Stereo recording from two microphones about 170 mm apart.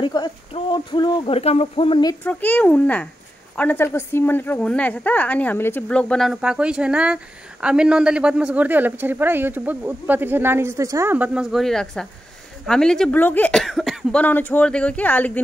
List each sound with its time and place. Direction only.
0.0 s speech: 30° left (ahead or behind)
2.2 s a woman's voice: 10° left (ahead or behind)